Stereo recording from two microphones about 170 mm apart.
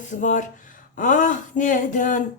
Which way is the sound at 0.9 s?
50° left (ahead or behind).